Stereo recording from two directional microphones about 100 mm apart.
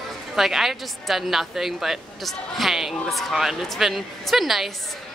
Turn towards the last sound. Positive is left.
turn(degrees=0)  # may be behind; listen again after turning